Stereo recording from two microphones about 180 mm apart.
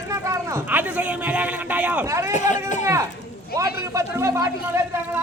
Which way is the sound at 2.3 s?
40° left (ahead or behind).